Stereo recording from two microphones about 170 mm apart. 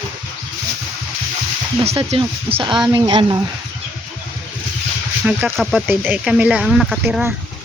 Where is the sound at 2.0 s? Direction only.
35° right (ahead or behind).